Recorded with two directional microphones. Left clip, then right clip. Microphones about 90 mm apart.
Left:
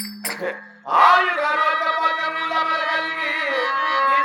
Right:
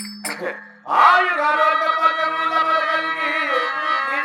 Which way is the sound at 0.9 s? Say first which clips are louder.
Right 1 dB; 30° left (ahead or behind).